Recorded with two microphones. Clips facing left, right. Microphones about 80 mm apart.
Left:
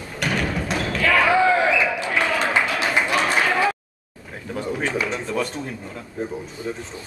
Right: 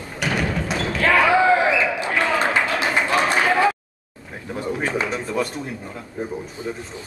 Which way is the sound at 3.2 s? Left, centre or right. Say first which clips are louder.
Right 4 dB; centre.